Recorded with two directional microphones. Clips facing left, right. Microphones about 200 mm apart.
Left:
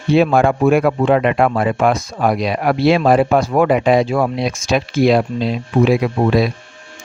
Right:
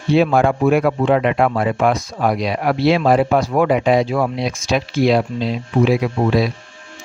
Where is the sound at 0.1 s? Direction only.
55° left (ahead or behind).